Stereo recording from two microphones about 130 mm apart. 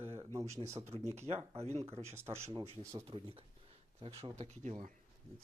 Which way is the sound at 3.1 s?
45° right (ahead or behind).